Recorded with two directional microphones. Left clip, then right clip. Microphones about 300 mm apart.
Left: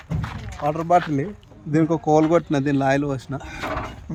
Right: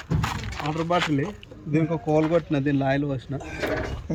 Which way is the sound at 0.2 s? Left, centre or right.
Right.